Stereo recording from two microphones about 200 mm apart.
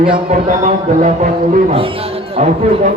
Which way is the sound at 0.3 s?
35° right (ahead or behind).